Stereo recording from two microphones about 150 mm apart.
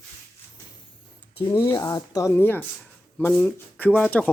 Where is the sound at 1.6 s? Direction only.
25° left (ahead or behind).